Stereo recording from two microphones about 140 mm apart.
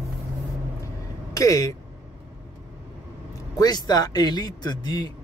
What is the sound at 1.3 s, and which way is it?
Speech, 25° left (ahead or behind).